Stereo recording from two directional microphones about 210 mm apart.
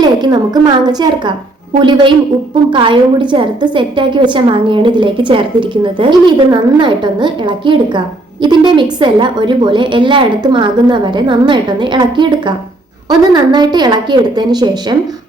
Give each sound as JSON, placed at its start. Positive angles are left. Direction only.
{"t": 0.0, "sound": "a woman's voice", "side_deg": -20}